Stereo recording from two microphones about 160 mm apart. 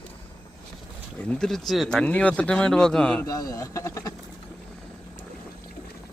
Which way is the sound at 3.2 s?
20° left (ahead or behind).